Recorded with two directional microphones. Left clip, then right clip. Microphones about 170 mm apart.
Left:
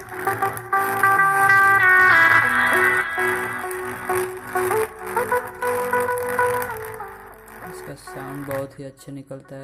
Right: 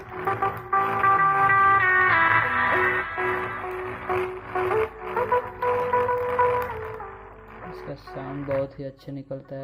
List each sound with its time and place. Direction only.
0.3 s music: 25° left (ahead or behind)